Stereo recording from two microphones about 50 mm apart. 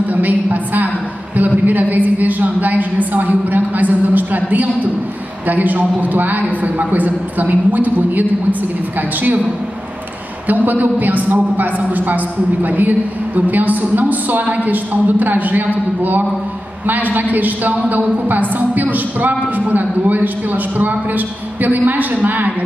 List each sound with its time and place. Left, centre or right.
0.1 s a sound: right
1.3 s a woman's voice: right
10.5 s a woman's voice: right